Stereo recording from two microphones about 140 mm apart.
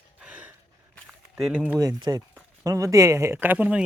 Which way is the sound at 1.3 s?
5° right (ahead or behind).